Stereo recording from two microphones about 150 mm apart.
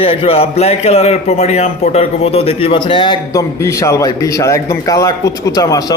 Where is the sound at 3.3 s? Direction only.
20° left (ahead or behind).